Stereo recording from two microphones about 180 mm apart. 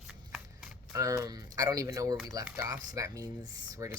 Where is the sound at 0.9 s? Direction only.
20° right (ahead or behind).